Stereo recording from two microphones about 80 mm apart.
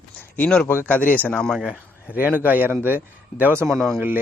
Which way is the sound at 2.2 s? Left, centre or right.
Right.